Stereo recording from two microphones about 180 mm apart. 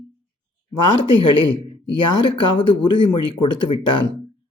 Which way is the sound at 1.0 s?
25° left (ahead or behind).